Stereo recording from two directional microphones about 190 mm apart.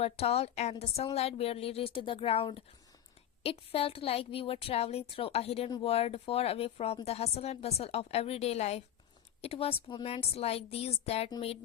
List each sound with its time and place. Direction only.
0.0 s a woman's voice: 30° left (ahead or behind)